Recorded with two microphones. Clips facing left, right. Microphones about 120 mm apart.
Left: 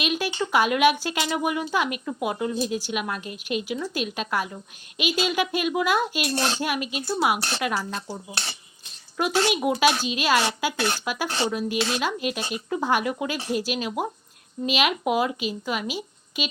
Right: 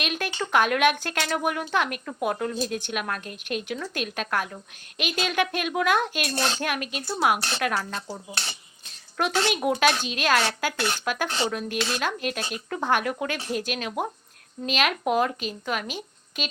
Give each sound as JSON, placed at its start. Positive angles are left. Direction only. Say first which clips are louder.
{"t": 0.0, "sound": "a sound", "louder": "left 3 dB", "side_deg": 5}
{"t": 0.4, "sound": "speech", "louder": "left 1 dB", "side_deg": 5}
{"t": 6.3, "sound": "speech", "louder": "left 1 dB", "side_deg": 25}
{"t": 6.6, "sound": "speech", "louder": "left 2 dB", "side_deg": 5}